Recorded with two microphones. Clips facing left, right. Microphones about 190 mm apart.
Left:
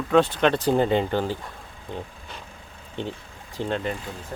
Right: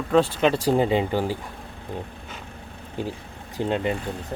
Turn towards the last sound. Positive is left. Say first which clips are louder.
# right 3 dB
turn(degrees=-15)  # may be behind; listen again after turning